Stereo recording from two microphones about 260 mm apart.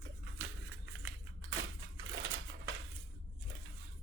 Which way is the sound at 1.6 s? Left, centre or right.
Right.